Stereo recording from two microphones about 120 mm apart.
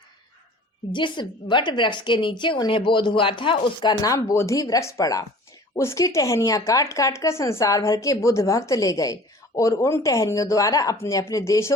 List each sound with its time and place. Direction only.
0.9 s a woman's voice: 40° left (ahead or behind)
4.0 s speech: 25° left (ahead or behind)